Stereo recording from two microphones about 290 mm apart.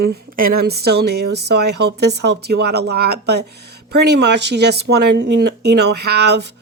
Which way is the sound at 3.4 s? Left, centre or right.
Right.